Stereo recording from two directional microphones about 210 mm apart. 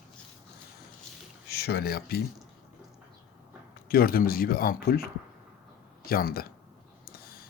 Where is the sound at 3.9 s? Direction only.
45° left (ahead or behind).